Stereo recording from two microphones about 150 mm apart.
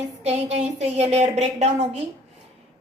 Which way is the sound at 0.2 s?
45° right (ahead or behind).